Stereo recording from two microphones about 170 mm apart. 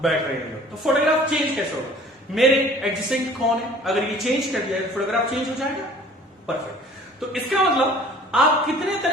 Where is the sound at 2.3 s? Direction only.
Centre (ahead or behind).